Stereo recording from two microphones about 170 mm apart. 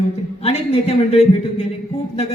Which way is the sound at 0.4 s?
35° left (ahead or behind).